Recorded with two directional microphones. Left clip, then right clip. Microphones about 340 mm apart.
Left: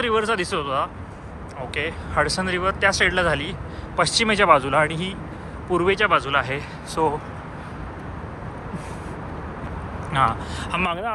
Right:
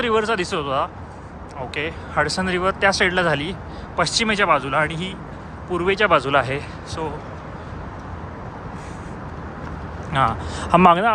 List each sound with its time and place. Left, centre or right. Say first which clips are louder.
0.0 s speech: right 1 dB; centre
10.1 s speech: right 1 dB; centre